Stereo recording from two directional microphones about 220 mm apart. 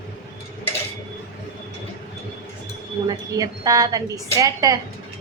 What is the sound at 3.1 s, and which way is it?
A woman's voice, 15° right (ahead or behind).